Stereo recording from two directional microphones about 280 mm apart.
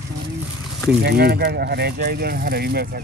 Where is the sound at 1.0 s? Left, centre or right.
Right.